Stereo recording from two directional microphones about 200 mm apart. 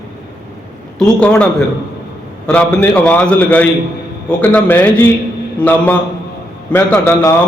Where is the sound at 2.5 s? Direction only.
5° left (ahead or behind).